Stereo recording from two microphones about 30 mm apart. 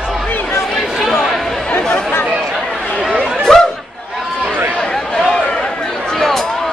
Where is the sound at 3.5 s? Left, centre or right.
Left.